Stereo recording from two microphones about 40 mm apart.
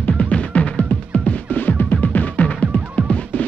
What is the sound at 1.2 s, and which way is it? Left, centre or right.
Music, left.